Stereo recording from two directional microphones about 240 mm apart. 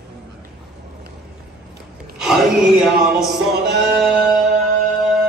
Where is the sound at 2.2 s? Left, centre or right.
Centre.